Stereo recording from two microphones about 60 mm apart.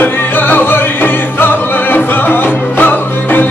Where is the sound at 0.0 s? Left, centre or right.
Left.